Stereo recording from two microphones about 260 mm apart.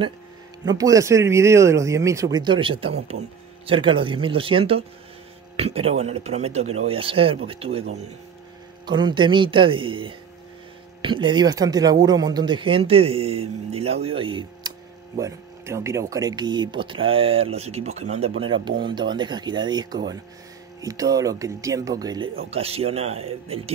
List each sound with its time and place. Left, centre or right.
0.7 s speech: centre
8.8 s speech: centre